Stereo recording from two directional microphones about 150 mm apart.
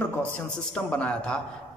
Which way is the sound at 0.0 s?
5° left (ahead or behind).